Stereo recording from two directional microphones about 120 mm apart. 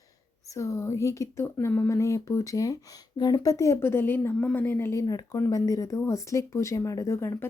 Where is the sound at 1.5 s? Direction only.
15° left (ahead or behind).